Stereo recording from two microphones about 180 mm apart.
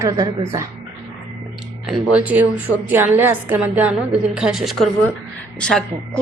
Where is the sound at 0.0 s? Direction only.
20° right (ahead or behind).